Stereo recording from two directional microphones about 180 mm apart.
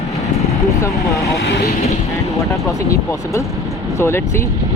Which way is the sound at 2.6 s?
15° left (ahead or behind).